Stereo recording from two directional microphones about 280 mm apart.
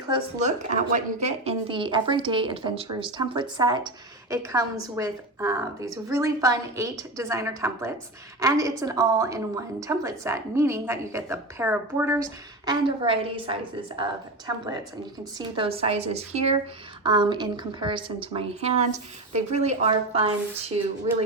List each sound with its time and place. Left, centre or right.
0.1 s a woman's voice: right